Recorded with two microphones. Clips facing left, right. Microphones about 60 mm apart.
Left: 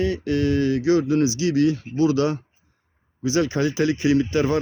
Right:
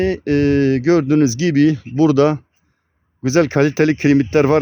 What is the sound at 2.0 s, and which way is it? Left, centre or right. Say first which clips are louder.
Speech: right 8 dB; right.